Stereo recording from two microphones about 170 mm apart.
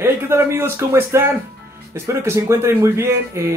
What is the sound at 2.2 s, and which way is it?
Speech, 15° right (ahead or behind).